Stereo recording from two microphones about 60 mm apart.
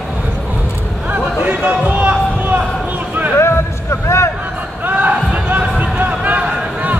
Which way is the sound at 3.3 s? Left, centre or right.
Left.